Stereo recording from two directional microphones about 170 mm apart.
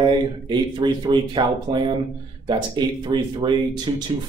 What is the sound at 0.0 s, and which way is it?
Speech, 25° right (ahead or behind).